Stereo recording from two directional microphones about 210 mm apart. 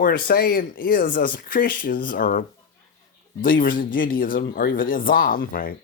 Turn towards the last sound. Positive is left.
turn(degrees=45)  # may be behind; listen again after turning